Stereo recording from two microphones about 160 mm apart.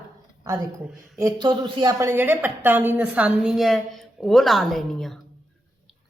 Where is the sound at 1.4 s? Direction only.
30° right (ahead or behind); by 5.2 s centre (ahead or behind).